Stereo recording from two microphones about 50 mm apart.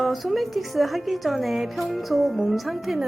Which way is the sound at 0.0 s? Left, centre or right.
Centre.